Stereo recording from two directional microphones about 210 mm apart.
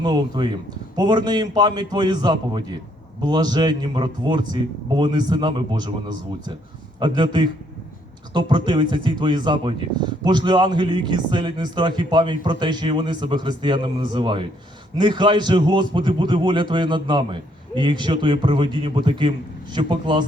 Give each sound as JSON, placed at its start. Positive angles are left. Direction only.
{"t": 0.0, "sound": "speech", "side_deg": -20}